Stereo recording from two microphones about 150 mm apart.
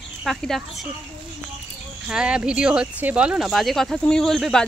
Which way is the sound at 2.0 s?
5° right (ahead or behind).